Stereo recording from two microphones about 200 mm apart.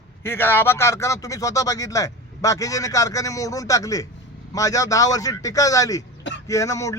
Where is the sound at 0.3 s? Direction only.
10° left (ahead or behind).